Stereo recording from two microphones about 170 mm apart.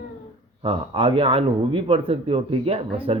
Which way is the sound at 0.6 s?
35° right (ahead or behind).